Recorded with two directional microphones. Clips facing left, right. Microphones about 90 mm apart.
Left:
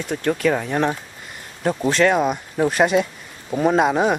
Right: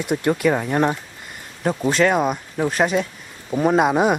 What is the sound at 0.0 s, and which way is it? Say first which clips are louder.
Speech: right 1 dB; 10° right (ahead or behind).